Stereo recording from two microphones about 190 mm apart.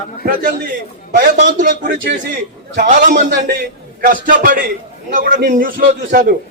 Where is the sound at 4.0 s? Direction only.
45° right (ahead or behind).